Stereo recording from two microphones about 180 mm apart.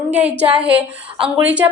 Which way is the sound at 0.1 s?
10° right (ahead or behind).